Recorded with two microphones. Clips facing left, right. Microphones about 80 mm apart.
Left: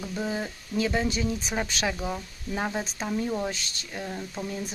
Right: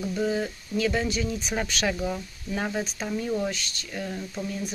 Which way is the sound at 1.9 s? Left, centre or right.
Centre.